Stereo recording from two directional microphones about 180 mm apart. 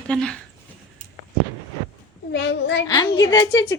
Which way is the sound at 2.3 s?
70° left (ahead or behind).